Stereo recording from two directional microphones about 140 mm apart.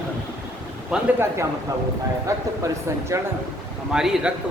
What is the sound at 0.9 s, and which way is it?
Speech, 5° right (ahead or behind).